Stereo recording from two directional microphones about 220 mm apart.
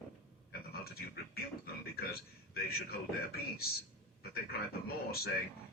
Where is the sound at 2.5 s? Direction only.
45° left (ahead or behind).